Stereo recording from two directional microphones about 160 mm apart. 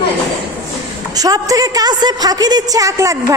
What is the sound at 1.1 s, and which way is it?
A woman's voice, 20° right (ahead or behind).